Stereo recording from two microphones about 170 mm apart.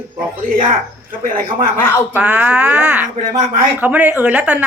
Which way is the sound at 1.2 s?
55° right (ahead or behind).